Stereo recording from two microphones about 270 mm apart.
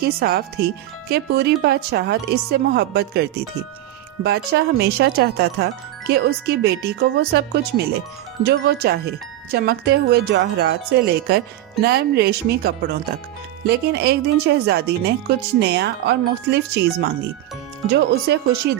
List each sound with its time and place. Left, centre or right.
0.0 s speech: right